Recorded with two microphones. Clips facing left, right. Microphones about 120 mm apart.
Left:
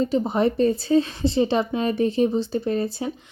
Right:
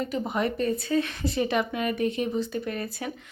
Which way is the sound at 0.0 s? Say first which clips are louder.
Left 7 dB; 30° left (ahead or behind).